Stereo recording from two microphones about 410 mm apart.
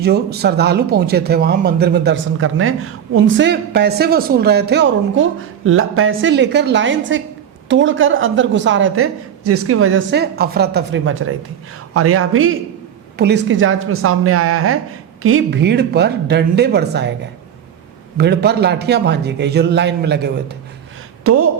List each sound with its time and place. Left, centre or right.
0.0 s a woman's voice: right
18.2 s a woman's voice: right